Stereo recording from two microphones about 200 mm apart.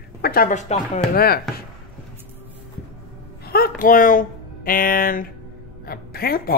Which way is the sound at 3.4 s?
50° left (ahead or behind).